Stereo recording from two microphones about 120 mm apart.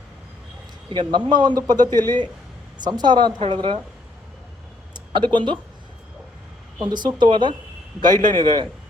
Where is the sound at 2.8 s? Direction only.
35° right (ahead or behind).